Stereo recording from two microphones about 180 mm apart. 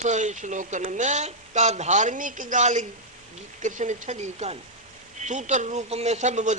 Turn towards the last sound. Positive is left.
turn(degrees=-40)  # may be behind; listen again after turning